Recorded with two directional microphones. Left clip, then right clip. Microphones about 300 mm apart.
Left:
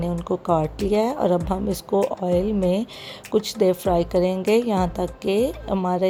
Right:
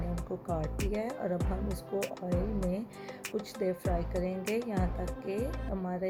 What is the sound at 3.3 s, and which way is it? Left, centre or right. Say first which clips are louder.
A woman's voice: left 15 dB; left.